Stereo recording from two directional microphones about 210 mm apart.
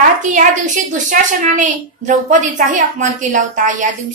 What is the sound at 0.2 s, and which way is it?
A woman's voice, 40° right (ahead or behind).